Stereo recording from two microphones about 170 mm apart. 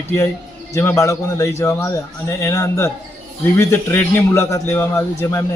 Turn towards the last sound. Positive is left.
turn(degrees=15)  # may be behind; listen again after turning